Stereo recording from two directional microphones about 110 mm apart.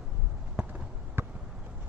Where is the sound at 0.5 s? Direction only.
15° right (ahead or behind).